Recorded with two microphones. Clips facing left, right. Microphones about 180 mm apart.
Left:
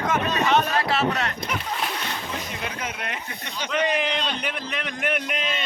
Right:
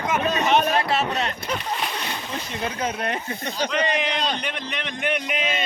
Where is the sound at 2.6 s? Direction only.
35° right (ahead or behind).